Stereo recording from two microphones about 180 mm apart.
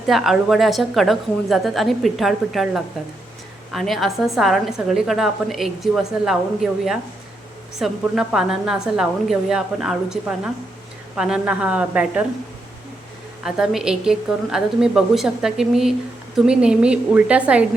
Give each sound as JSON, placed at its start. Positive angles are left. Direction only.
{"t": 0.1, "sound": "a woman's voice", "side_deg": 0}
{"t": 13.4, "sound": "a woman's voice", "side_deg": -5}